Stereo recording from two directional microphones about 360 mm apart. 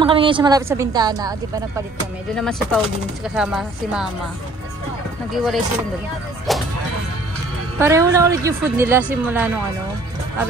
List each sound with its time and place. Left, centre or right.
0.0 s a woman's voice: centre
2.3 s speech: centre
5.3 s speech: centre
7.8 s a woman's voice: centre